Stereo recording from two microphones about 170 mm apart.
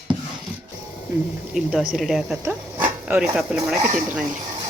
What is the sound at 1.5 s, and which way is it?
Speech, centre (ahead or behind).